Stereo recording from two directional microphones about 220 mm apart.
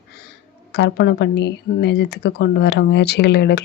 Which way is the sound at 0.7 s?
50° left (ahead or behind).